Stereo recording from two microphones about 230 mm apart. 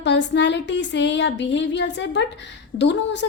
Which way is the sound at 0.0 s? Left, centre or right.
Left.